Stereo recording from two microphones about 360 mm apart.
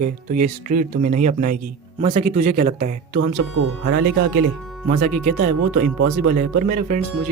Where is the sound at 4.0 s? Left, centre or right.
Right.